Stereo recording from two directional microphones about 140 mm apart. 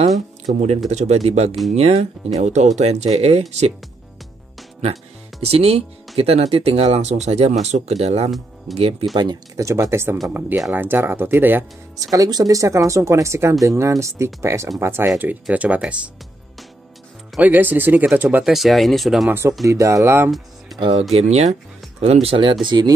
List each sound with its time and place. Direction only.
0.5 s speech: 55° right (ahead or behind)
5.4 s speech: 45° right (ahead or behind)
8.7 s speech: centre (ahead or behind)
9.1 s speech: 30° right (ahead or behind); by 11.6 s 15° right (ahead or behind)
12.0 s speech: 25° right (ahead or behind); by 16.1 s 10° right (ahead or behind)
17.4 s speech: 15° right (ahead or behind)
18.5 s speech: centre (ahead or behind)
19.2 s speech: 15° right (ahead or behind)
20.2 s speech: centre (ahead or behind)
21.1 s speech: 50° right (ahead or behind); by 22.9 s 35° right (ahead or behind)